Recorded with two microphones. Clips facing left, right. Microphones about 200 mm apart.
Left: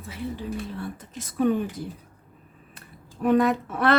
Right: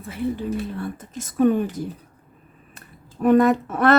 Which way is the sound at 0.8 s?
50° right (ahead or behind).